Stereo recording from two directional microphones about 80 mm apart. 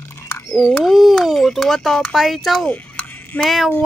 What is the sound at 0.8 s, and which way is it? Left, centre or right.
Speech, centre.